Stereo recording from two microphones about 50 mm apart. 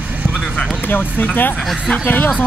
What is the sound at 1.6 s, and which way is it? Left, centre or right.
Speech, centre.